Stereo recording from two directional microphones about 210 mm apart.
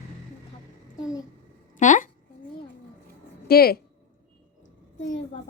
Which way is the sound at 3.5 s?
45° left (ahead or behind).